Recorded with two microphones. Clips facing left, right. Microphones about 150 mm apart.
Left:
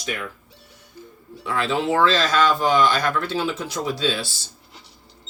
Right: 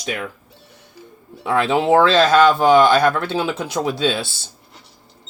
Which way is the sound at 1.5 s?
60° right (ahead or behind).